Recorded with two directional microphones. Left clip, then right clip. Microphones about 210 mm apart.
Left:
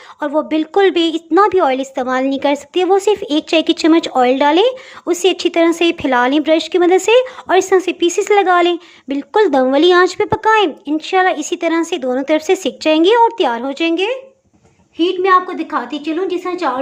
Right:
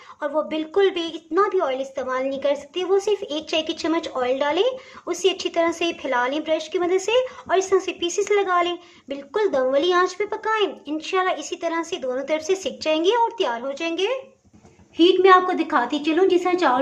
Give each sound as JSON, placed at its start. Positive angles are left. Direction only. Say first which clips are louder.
{"t": 0.2, "sound": "a woman's voice", "louder": "left 7 dB", "side_deg": 30}
{"t": 14.9, "sound": "a woman's voice", "louder": "left 2 dB", "side_deg": 10}